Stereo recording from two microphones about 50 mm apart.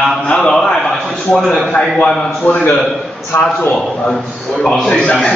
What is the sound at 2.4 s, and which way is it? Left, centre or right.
Speech, left.